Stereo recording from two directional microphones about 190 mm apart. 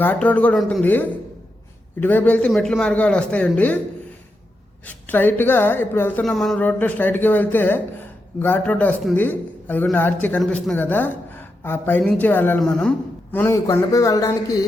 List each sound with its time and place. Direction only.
0.0 s a man's voice: 10° left (ahead or behind)
4.9 s a man's voice: 10° left (ahead or behind)
13.3 s a man's voice: 15° left (ahead or behind)